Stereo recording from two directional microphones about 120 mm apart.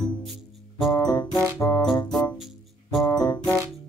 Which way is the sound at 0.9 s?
35° left (ahead or behind).